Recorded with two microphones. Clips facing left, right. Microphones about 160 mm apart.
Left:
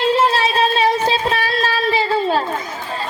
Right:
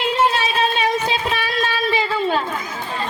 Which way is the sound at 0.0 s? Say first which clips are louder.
Left 3 dB; 30° left (ahead or behind).